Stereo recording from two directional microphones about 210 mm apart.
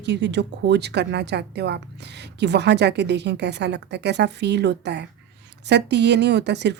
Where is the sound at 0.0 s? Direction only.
55° right (ahead or behind).